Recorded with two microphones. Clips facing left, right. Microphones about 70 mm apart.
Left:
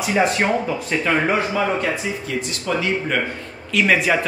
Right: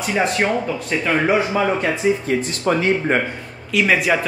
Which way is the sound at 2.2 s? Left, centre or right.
Right.